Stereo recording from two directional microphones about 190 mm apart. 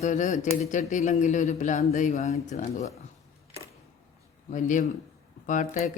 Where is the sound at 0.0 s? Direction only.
40° left (ahead or behind).